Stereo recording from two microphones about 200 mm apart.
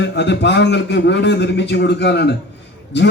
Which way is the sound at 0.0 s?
60° left (ahead or behind).